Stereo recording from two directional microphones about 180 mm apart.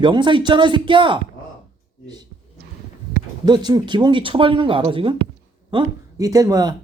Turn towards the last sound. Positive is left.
turn(degrees=-20)  # may be behind; listen again after turning